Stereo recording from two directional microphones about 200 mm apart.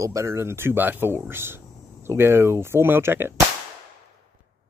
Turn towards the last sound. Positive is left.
turn(degrees=-10)  # may be behind; listen again after turning